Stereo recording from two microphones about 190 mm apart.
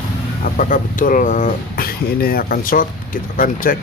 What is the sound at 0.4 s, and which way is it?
Speech, 45° left (ahead or behind).